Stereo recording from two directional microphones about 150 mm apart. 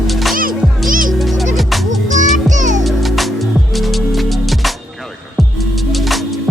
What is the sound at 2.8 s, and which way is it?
Music, centre (ahead or behind).